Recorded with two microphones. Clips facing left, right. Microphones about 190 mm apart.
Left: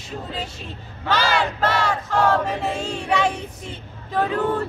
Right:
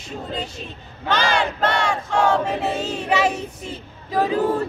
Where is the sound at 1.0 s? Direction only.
5° left (ahead or behind).